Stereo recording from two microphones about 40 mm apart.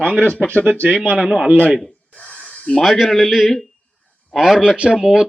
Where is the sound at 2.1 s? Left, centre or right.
Left.